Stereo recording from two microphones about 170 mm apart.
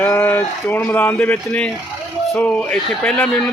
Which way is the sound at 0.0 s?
15° left (ahead or behind).